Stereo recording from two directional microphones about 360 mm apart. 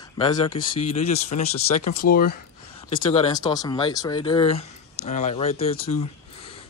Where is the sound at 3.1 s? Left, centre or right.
Centre.